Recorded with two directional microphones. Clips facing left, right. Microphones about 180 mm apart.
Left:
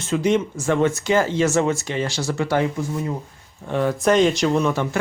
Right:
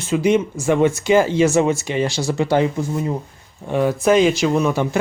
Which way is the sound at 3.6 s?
10° right (ahead or behind).